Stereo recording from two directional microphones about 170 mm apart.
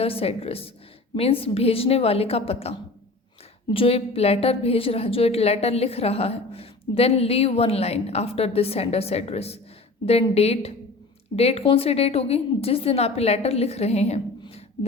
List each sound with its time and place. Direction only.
0.0 s a woman's voice: 35° left (ahead or behind)